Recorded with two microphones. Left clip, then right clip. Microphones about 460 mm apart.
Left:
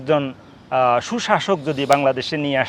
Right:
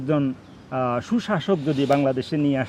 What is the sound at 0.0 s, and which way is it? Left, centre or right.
A man's voice, left.